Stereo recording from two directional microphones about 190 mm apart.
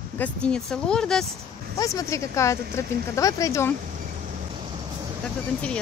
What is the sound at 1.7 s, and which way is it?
Speech, 15° left (ahead or behind).